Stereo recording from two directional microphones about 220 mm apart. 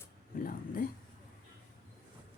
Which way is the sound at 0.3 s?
40° left (ahead or behind).